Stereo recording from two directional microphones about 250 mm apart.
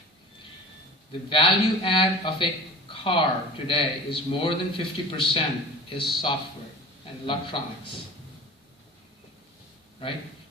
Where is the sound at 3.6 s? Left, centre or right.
Left.